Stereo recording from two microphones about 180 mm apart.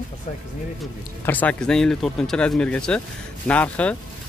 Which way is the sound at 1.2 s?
10° left (ahead or behind).